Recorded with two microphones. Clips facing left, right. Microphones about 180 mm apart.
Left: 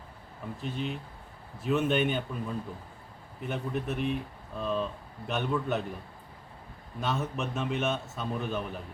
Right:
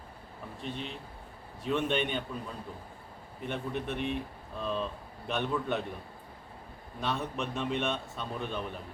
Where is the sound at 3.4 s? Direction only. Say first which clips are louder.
Left 2 dB; 5° left (ahead or behind).